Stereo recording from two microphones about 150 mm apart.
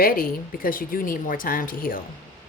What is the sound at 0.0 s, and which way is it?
A woman's voice, 70° left (ahead or behind).